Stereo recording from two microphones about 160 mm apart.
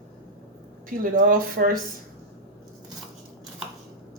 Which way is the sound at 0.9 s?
60° right (ahead or behind).